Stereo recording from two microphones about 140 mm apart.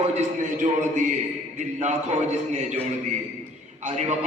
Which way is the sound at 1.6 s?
55° right (ahead or behind).